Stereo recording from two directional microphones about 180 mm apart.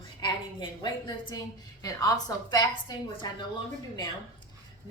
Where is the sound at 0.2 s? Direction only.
25° left (ahead or behind).